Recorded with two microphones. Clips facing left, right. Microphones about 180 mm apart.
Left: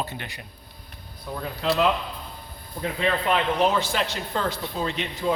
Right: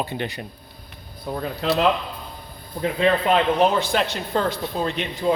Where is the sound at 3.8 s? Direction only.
55° right (ahead or behind).